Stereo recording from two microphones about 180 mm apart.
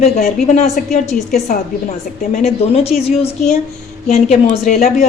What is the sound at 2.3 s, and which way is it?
A woman's voice, 35° left (ahead or behind).